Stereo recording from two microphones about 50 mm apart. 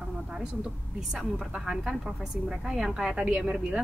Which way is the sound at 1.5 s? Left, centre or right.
Centre.